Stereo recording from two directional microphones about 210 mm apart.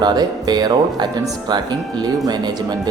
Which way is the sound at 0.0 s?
20° right (ahead or behind).